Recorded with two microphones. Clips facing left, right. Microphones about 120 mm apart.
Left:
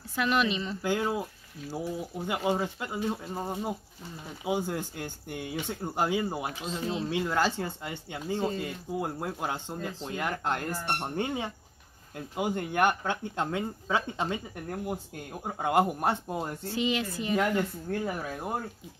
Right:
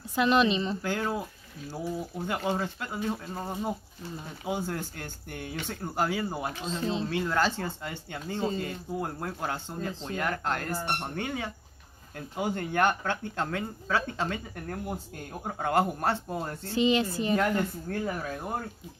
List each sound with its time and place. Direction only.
0.1 s a woman's voice: 25° right (ahead or behind)
0.8 s speech: 10° left (ahead or behind)
2.2 s speech: 10° left (ahead or behind)
12.4 s speech: 10° left (ahead or behind)
16.3 s speech: 5° left (ahead or behind)
16.7 s a woman's voice: 30° right (ahead or behind)
18.0 s speech: 10° left (ahead or behind)